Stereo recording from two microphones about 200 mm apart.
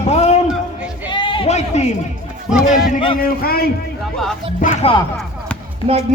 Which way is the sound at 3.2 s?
50° left (ahead or behind).